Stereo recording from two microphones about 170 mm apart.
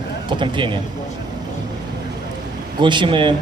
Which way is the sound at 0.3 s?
30° right (ahead or behind).